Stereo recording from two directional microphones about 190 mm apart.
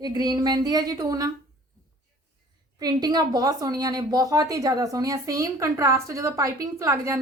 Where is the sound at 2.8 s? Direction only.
20° right (ahead or behind).